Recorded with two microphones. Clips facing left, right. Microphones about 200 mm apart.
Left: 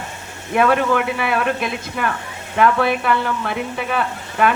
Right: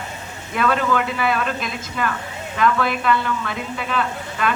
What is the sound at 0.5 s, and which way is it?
A woman's voice, 55° left (ahead or behind).